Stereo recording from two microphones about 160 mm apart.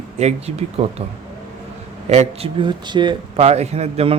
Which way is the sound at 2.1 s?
40° right (ahead or behind).